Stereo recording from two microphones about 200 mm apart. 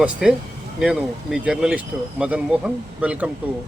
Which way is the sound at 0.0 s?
5° right (ahead or behind).